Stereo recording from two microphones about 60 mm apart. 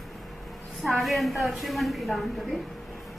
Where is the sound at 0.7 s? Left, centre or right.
Centre.